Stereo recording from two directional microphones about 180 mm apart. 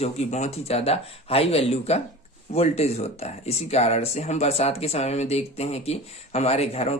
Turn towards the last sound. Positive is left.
turn(degrees=35)  # may be behind; listen again after turning